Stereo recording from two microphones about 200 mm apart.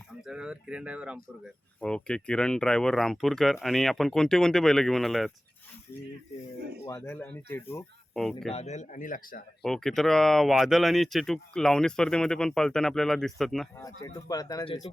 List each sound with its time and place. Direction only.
0.3 s speech: 5° right (ahead or behind)
6.3 s speech: 35° left (ahead or behind)
6.8 s speech: 15° left (ahead or behind)
8.1 s speech: centre (ahead or behind)
8.4 s speech: 35° left (ahead or behind)
9.6 s speech: centre (ahead or behind)
14.0 s speech: 20° left (ahead or behind)